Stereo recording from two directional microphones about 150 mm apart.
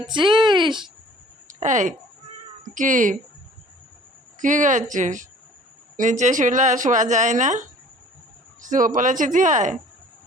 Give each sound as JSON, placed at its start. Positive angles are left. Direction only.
{"t": 0.0, "sound": "speech", "side_deg": -30}
{"t": 1.5, "sound": "a woman's voice", "side_deg": -55}
{"t": 4.4, "sound": "a woman's voice", "side_deg": -60}